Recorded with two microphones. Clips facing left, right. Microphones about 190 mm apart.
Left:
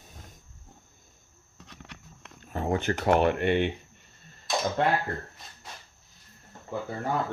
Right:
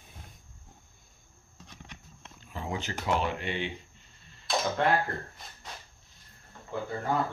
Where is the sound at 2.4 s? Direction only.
55° left (ahead or behind).